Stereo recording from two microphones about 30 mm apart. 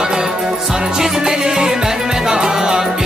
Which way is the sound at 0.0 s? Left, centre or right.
Right.